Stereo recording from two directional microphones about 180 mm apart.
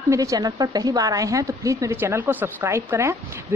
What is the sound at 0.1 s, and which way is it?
A woman's voice, 20° right (ahead or behind).